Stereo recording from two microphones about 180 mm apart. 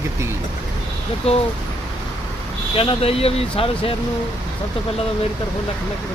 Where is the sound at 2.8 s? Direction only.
30° left (ahead or behind).